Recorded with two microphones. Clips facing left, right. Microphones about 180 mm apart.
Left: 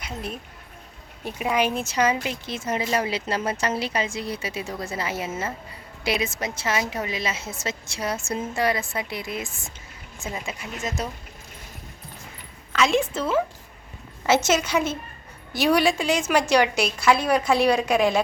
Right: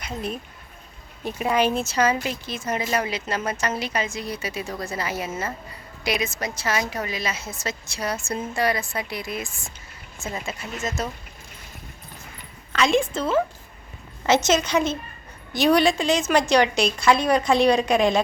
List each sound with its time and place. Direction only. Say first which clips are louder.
0.0 s a woman's voice: right 3 dB; 5° left (ahead or behind)
12.7 s a woman's voice: right 1 dB; 5° left (ahead or behind)